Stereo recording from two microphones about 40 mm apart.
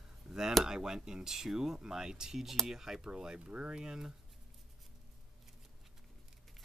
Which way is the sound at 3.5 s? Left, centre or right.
Right.